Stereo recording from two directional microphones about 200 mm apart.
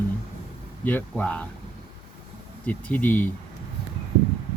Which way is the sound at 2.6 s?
10° left (ahead or behind).